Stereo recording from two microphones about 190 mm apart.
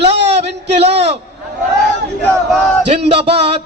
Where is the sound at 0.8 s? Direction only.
35° right (ahead or behind).